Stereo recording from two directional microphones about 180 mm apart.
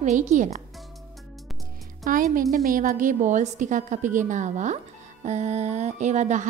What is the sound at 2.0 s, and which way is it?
A woman's voice, 50° right (ahead or behind).